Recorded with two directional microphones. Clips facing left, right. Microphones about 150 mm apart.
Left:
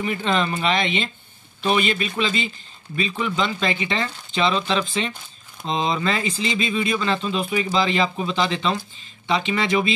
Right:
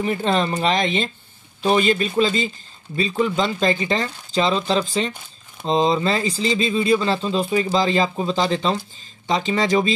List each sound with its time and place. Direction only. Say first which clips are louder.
0.0 s speech: right 2 dB; 40° right (ahead or behind)